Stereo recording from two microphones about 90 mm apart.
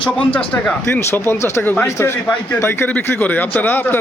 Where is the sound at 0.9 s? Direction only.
30° left (ahead or behind).